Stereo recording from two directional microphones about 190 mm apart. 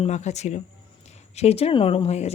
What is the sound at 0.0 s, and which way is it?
Speech, 35° left (ahead or behind).